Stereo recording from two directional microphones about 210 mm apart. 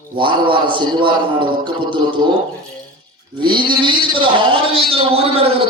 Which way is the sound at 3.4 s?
20° right (ahead or behind).